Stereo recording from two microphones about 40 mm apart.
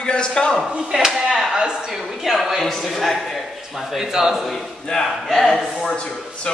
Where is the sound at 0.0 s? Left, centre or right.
Left.